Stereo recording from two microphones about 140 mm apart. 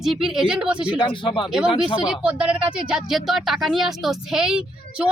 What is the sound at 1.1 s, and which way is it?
Speech, 35° left (ahead or behind).